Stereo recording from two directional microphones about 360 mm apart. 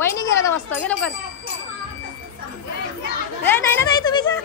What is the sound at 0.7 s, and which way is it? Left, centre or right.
Speech, centre.